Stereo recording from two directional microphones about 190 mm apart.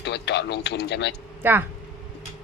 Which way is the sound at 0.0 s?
65° left (ahead or behind).